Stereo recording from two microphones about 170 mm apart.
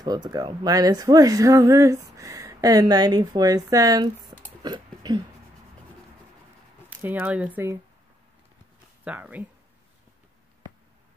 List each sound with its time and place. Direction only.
0.0 s speech: 25° right (ahead or behind)
4.6 s hiccup: 25° right (ahead or behind)
6.9 s speech: 10° right (ahead or behind)
9.0 s speech: 10° right (ahead or behind)